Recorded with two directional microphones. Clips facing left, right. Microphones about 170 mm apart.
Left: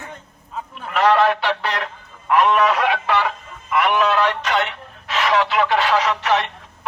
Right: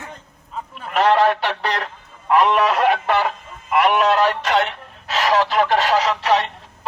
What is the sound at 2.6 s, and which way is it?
Speech, 40° right (ahead or behind).